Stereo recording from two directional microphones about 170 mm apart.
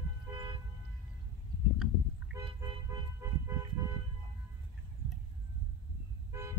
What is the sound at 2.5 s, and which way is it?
Vehicle, 20° right (ahead or behind).